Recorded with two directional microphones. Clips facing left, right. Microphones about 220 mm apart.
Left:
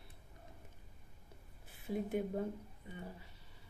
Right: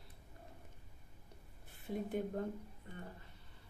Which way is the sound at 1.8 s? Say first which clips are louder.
Left 2 dB; 5° left (ahead or behind).